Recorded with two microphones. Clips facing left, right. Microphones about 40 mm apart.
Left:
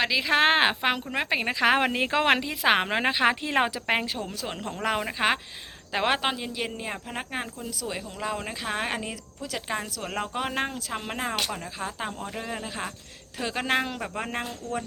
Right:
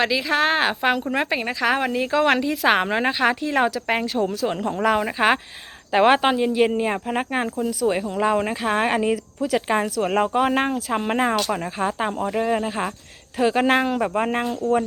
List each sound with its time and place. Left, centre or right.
0.3 s a woman's voice: left
0.8 s speech: centre
1.6 s speech: left
2.4 s a woman's voice: centre
4.4 s speech: centre
5.9 s speech: centre
8.6 s speech: centre
9.0 s speech: right
10.3 s speech: centre